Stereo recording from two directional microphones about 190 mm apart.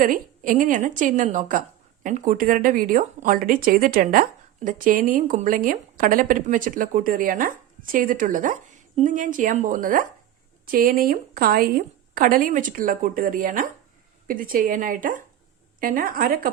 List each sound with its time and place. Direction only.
0.0 s a woman's voice: 45° right (ahead or behind)